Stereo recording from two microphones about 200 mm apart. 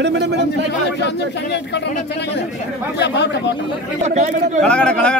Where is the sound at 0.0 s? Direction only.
60° right (ahead or behind).